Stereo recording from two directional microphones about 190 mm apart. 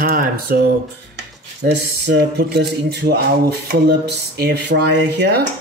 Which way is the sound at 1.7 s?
65° right (ahead or behind).